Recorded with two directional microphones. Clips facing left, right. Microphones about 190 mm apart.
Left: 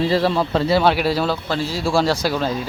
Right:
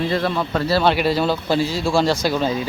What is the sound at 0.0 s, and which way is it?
Speech, 30° left (ahead or behind).